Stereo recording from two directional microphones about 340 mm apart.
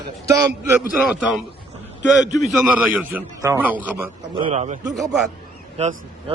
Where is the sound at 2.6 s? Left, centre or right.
Centre.